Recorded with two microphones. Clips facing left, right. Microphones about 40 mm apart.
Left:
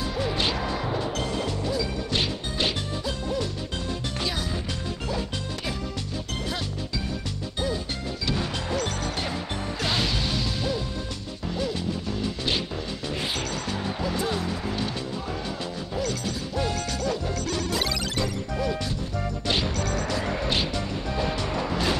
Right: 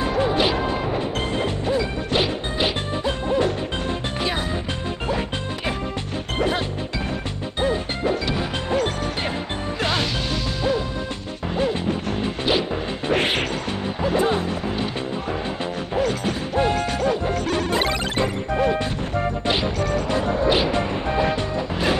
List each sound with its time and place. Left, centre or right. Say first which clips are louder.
0.0 s smash: right 7 dB; right
1.4 s music: right 5 dB; right
3.1 s music: right 9 dB; right
7.6 s music: right 9 dB; right
8.3 s smash: right 4 dB; right
11.5 s music: right 7 dB; right
13.1 s music: right 11 dB; right
14.0 s music: right 9 dB; right
16.0 s music: right 7 dB; right
19.5 s music: right 2 dB; centre
20.6 s music: right 7 dB; right